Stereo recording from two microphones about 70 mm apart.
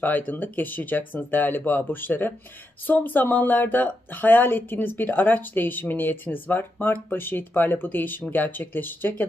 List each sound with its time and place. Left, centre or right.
0.0 s speech: left